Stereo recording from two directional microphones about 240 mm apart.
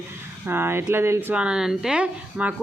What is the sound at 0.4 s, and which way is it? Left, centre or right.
Speech, centre.